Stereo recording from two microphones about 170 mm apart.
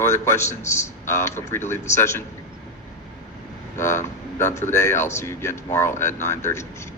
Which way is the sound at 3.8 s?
15° left (ahead or behind).